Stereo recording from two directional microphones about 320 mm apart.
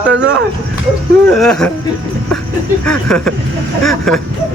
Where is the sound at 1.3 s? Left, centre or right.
Centre.